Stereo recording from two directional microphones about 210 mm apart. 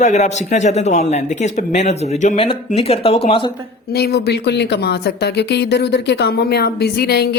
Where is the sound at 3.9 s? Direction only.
50° left (ahead or behind).